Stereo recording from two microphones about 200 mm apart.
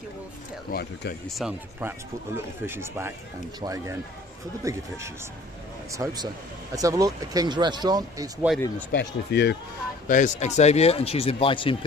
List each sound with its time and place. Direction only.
0.7 s speech: 55° left (ahead or behind)
1.3 s speech: 5° right (ahead or behind); by 8.4 s 20° right (ahead or behind)
8.9 s speech: 60° left (ahead or behind)
10.1 s speech: 40° left (ahead or behind)